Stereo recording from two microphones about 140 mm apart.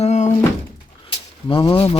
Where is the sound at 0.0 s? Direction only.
50° left (ahead or behind).